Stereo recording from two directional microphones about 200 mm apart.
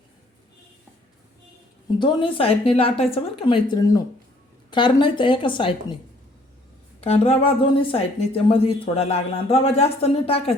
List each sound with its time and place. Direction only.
2.0 s speech: 25° left (ahead or behind)
7.0 s speech: 30° left (ahead or behind)